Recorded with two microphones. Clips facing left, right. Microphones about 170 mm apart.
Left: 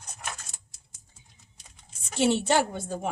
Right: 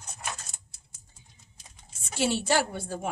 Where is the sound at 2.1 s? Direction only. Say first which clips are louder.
Left 3 dB; 20° left (ahead or behind).